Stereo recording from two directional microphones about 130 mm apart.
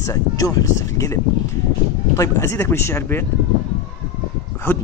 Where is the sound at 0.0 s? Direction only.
25° left (ahead or behind).